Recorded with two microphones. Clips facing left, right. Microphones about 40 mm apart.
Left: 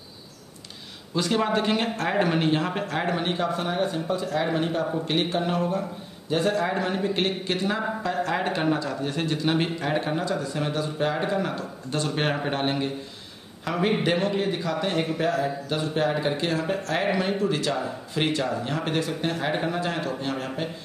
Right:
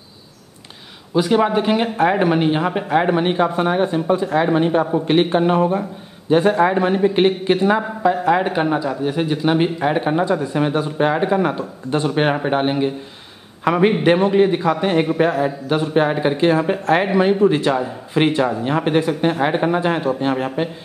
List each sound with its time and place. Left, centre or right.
1.1 s a man's voice: centre
13.7 s a man's voice: right